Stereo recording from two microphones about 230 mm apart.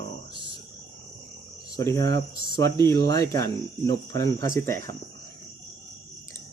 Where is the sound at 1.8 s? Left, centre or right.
Centre.